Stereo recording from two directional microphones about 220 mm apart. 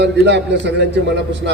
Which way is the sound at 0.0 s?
50° right (ahead or behind).